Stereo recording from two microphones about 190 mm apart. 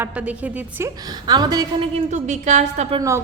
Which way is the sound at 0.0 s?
5° right (ahead or behind).